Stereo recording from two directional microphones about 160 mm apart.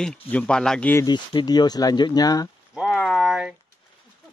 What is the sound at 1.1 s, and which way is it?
Speech, 25° left (ahead or behind).